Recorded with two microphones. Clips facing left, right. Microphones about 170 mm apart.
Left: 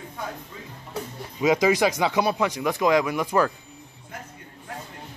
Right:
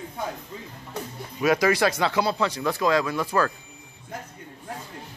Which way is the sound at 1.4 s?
15° left (ahead or behind).